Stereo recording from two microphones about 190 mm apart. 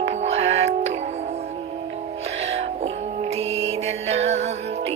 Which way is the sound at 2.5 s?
35° right (ahead or behind).